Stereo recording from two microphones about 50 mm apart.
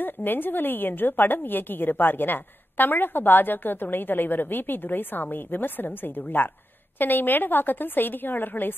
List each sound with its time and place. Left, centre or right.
0.0 s a woman's voice: left